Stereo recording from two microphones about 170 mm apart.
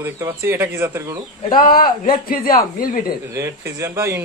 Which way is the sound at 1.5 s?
60° left (ahead or behind).